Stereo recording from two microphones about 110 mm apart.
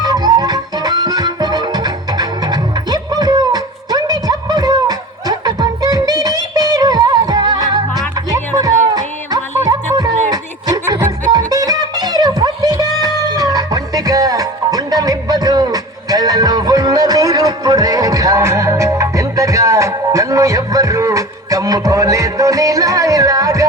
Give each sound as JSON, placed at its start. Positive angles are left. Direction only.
{"t": 0.0, "sound": "music", "side_deg": -35}